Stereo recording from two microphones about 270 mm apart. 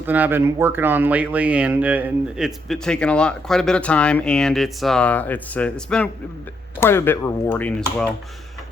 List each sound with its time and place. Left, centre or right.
0.0 s speech: centre